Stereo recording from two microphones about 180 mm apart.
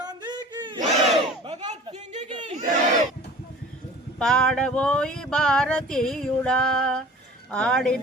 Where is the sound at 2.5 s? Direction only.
40° right (ahead or behind).